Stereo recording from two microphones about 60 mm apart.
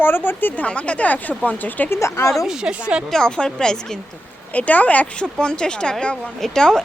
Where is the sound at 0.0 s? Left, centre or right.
Left.